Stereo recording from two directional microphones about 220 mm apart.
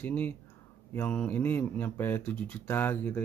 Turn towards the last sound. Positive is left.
turn(degrees=10)  # may be behind; listen again after turning